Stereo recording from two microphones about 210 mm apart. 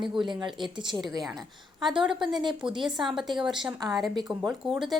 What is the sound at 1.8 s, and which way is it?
A woman's voice, 5° right (ahead or behind).